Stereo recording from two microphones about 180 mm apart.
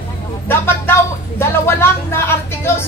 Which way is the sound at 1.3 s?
15° left (ahead or behind).